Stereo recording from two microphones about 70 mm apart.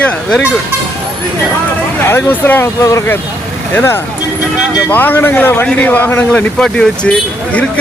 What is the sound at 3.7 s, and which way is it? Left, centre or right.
A man's voice, left.